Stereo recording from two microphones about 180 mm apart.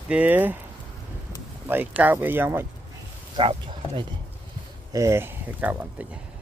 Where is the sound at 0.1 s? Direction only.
10° right (ahead or behind).